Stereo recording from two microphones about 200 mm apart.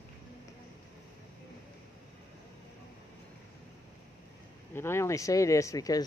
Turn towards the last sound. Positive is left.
turn(degrees=15)  # may be behind; listen again after turning